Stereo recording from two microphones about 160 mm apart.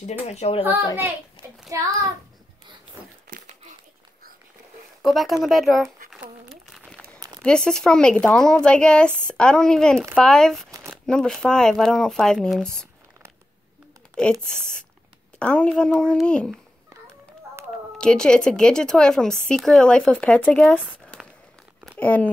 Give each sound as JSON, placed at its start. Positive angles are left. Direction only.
{"t": 0.3, "sound": "speech", "side_deg": 40}
{"t": 1.7, "sound": "a child's voice", "side_deg": -20}
{"t": 3.3, "sound": "a sound", "side_deg": -60}
{"t": 5.0, "sound": "speech", "side_deg": 0}
{"t": 6.2, "sound": "crumpling", "side_deg": -5}
{"t": 7.2, "sound": "a sound", "side_deg": -20}
{"t": 7.4, "sound": "speech", "side_deg": 5}
{"t": 14.4, "sound": "speech", "side_deg": 5}
{"t": 17.9, "sound": "speech", "side_deg": 5}
{"t": 21.0, "sound": "a sound", "side_deg": 5}
{"t": 21.9, "sound": "speech", "side_deg": 10}